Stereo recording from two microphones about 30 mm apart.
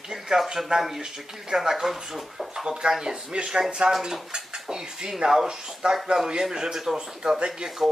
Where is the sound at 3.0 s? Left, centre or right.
Right.